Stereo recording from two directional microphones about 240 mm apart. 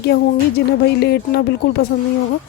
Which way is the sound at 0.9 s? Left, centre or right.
Left.